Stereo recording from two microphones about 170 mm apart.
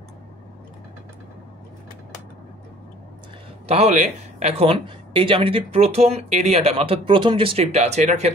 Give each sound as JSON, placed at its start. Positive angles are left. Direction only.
{"t": 3.6, "sound": "speech", "side_deg": -40}